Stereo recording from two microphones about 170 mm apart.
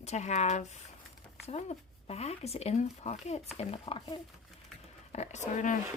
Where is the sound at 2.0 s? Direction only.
35° left (ahead or behind).